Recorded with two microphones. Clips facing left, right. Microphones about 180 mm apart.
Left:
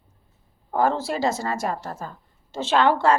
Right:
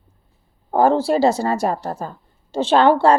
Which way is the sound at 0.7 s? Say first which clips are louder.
Right 7 dB; 30° right (ahead or behind).